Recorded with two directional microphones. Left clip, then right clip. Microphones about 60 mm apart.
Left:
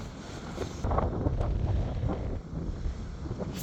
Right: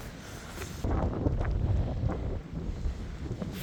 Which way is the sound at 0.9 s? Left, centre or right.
Centre.